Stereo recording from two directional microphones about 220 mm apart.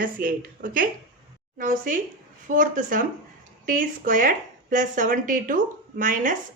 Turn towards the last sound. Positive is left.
turn(degrees=-35)  # may be behind; listen again after turning